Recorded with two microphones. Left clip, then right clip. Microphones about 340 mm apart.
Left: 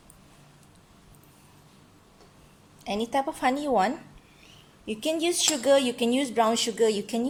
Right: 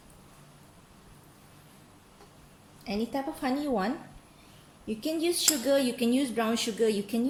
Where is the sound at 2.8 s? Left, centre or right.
Left.